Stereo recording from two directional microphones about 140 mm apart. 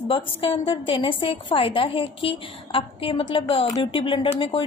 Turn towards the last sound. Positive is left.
turn(degrees=35)  # may be behind; listen again after turning